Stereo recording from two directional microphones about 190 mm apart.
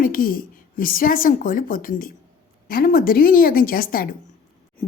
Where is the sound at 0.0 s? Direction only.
45° left (ahead or behind).